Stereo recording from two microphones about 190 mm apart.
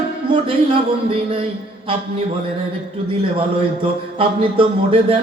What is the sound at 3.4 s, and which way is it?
A man's voice, 30° right (ahead or behind).